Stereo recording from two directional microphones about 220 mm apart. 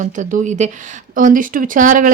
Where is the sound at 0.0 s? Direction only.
35° right (ahead or behind).